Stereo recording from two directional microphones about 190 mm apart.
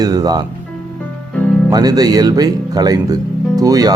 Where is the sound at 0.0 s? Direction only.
20° right (ahead or behind).